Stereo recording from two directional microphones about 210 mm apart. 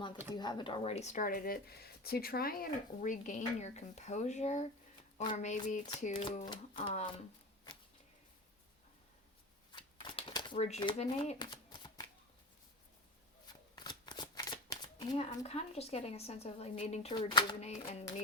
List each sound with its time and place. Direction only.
0.3 s speech: 20° left (ahead or behind)
9.7 s shuffling cards: 25° left (ahead or behind)
13.7 s speech: 20° left (ahead or behind)